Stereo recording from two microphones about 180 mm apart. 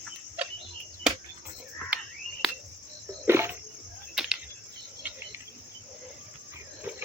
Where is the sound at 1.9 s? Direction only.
5° right (ahead or behind).